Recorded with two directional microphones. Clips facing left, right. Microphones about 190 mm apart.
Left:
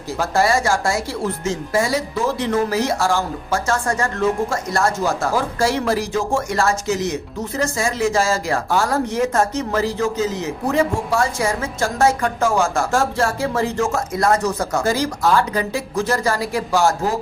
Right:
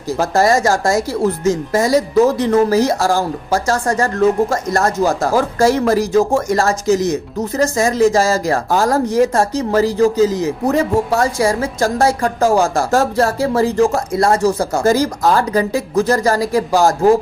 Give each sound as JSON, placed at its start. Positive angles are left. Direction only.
{"t": 0.2, "sound": "speech", "side_deg": -40}
{"t": 14.8, "sound": "speech", "side_deg": -45}